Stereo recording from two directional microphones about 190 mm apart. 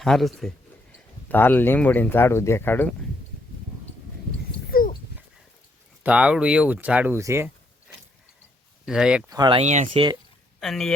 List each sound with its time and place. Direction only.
0.0 s a man's voice: centre (ahead or behind)
4.7 s dog: 45° left (ahead or behind)
6.0 s speech: 5° right (ahead or behind)
8.9 s a man's voice: 5° right (ahead or behind)
9.3 s speech: 25° right (ahead or behind)
10.6 s a man's voice: centre (ahead or behind)